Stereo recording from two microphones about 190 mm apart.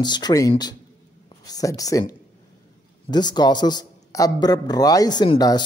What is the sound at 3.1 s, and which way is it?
A man's voice, 20° left (ahead or behind).